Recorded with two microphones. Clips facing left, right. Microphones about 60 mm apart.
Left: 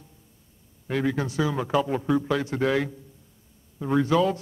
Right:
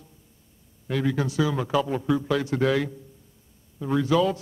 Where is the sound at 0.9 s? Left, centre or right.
Left.